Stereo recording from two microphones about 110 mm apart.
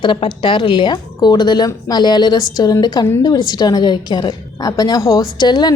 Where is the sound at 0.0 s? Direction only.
45° left (ahead or behind).